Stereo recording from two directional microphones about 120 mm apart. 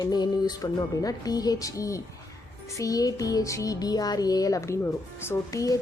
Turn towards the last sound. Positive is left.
turn(degrees=30)  # may be behind; listen again after turning